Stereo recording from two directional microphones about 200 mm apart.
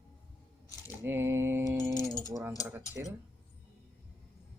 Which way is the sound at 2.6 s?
10° right (ahead or behind).